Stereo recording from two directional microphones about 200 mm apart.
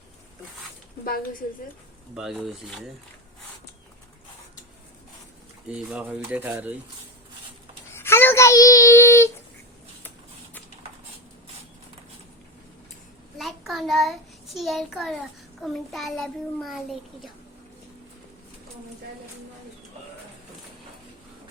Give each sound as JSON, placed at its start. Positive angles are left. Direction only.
{"t": 1.0, "sound": "a woman's voice", "side_deg": 45}
{"t": 2.1, "sound": "a child's voice", "side_deg": 0}
{"t": 5.6, "sound": "speech", "side_deg": -5}
{"t": 7.9, "sound": "a sound", "side_deg": 10}
{"t": 13.4, "sound": "child singing", "side_deg": 0}
{"t": 15.6, "sound": "a child's voice", "side_deg": 0}